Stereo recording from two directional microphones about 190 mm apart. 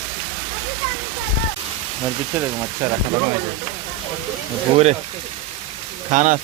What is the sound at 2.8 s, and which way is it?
Speech, 20° right (ahead or behind).